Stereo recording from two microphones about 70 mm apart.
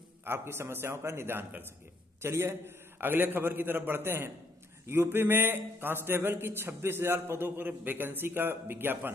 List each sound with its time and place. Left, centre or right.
0.2 s a man's voice: right